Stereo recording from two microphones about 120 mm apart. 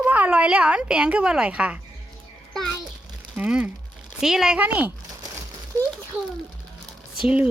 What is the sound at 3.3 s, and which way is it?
A woman's voice, 10° right (ahead or behind).